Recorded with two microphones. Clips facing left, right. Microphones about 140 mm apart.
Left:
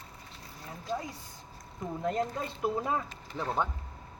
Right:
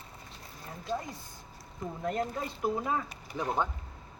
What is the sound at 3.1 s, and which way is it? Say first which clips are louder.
Speech: right 1 dB; 15° right (ahead or behind).